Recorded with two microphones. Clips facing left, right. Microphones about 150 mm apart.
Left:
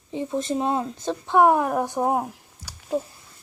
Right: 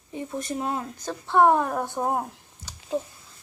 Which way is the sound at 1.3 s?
10° left (ahead or behind).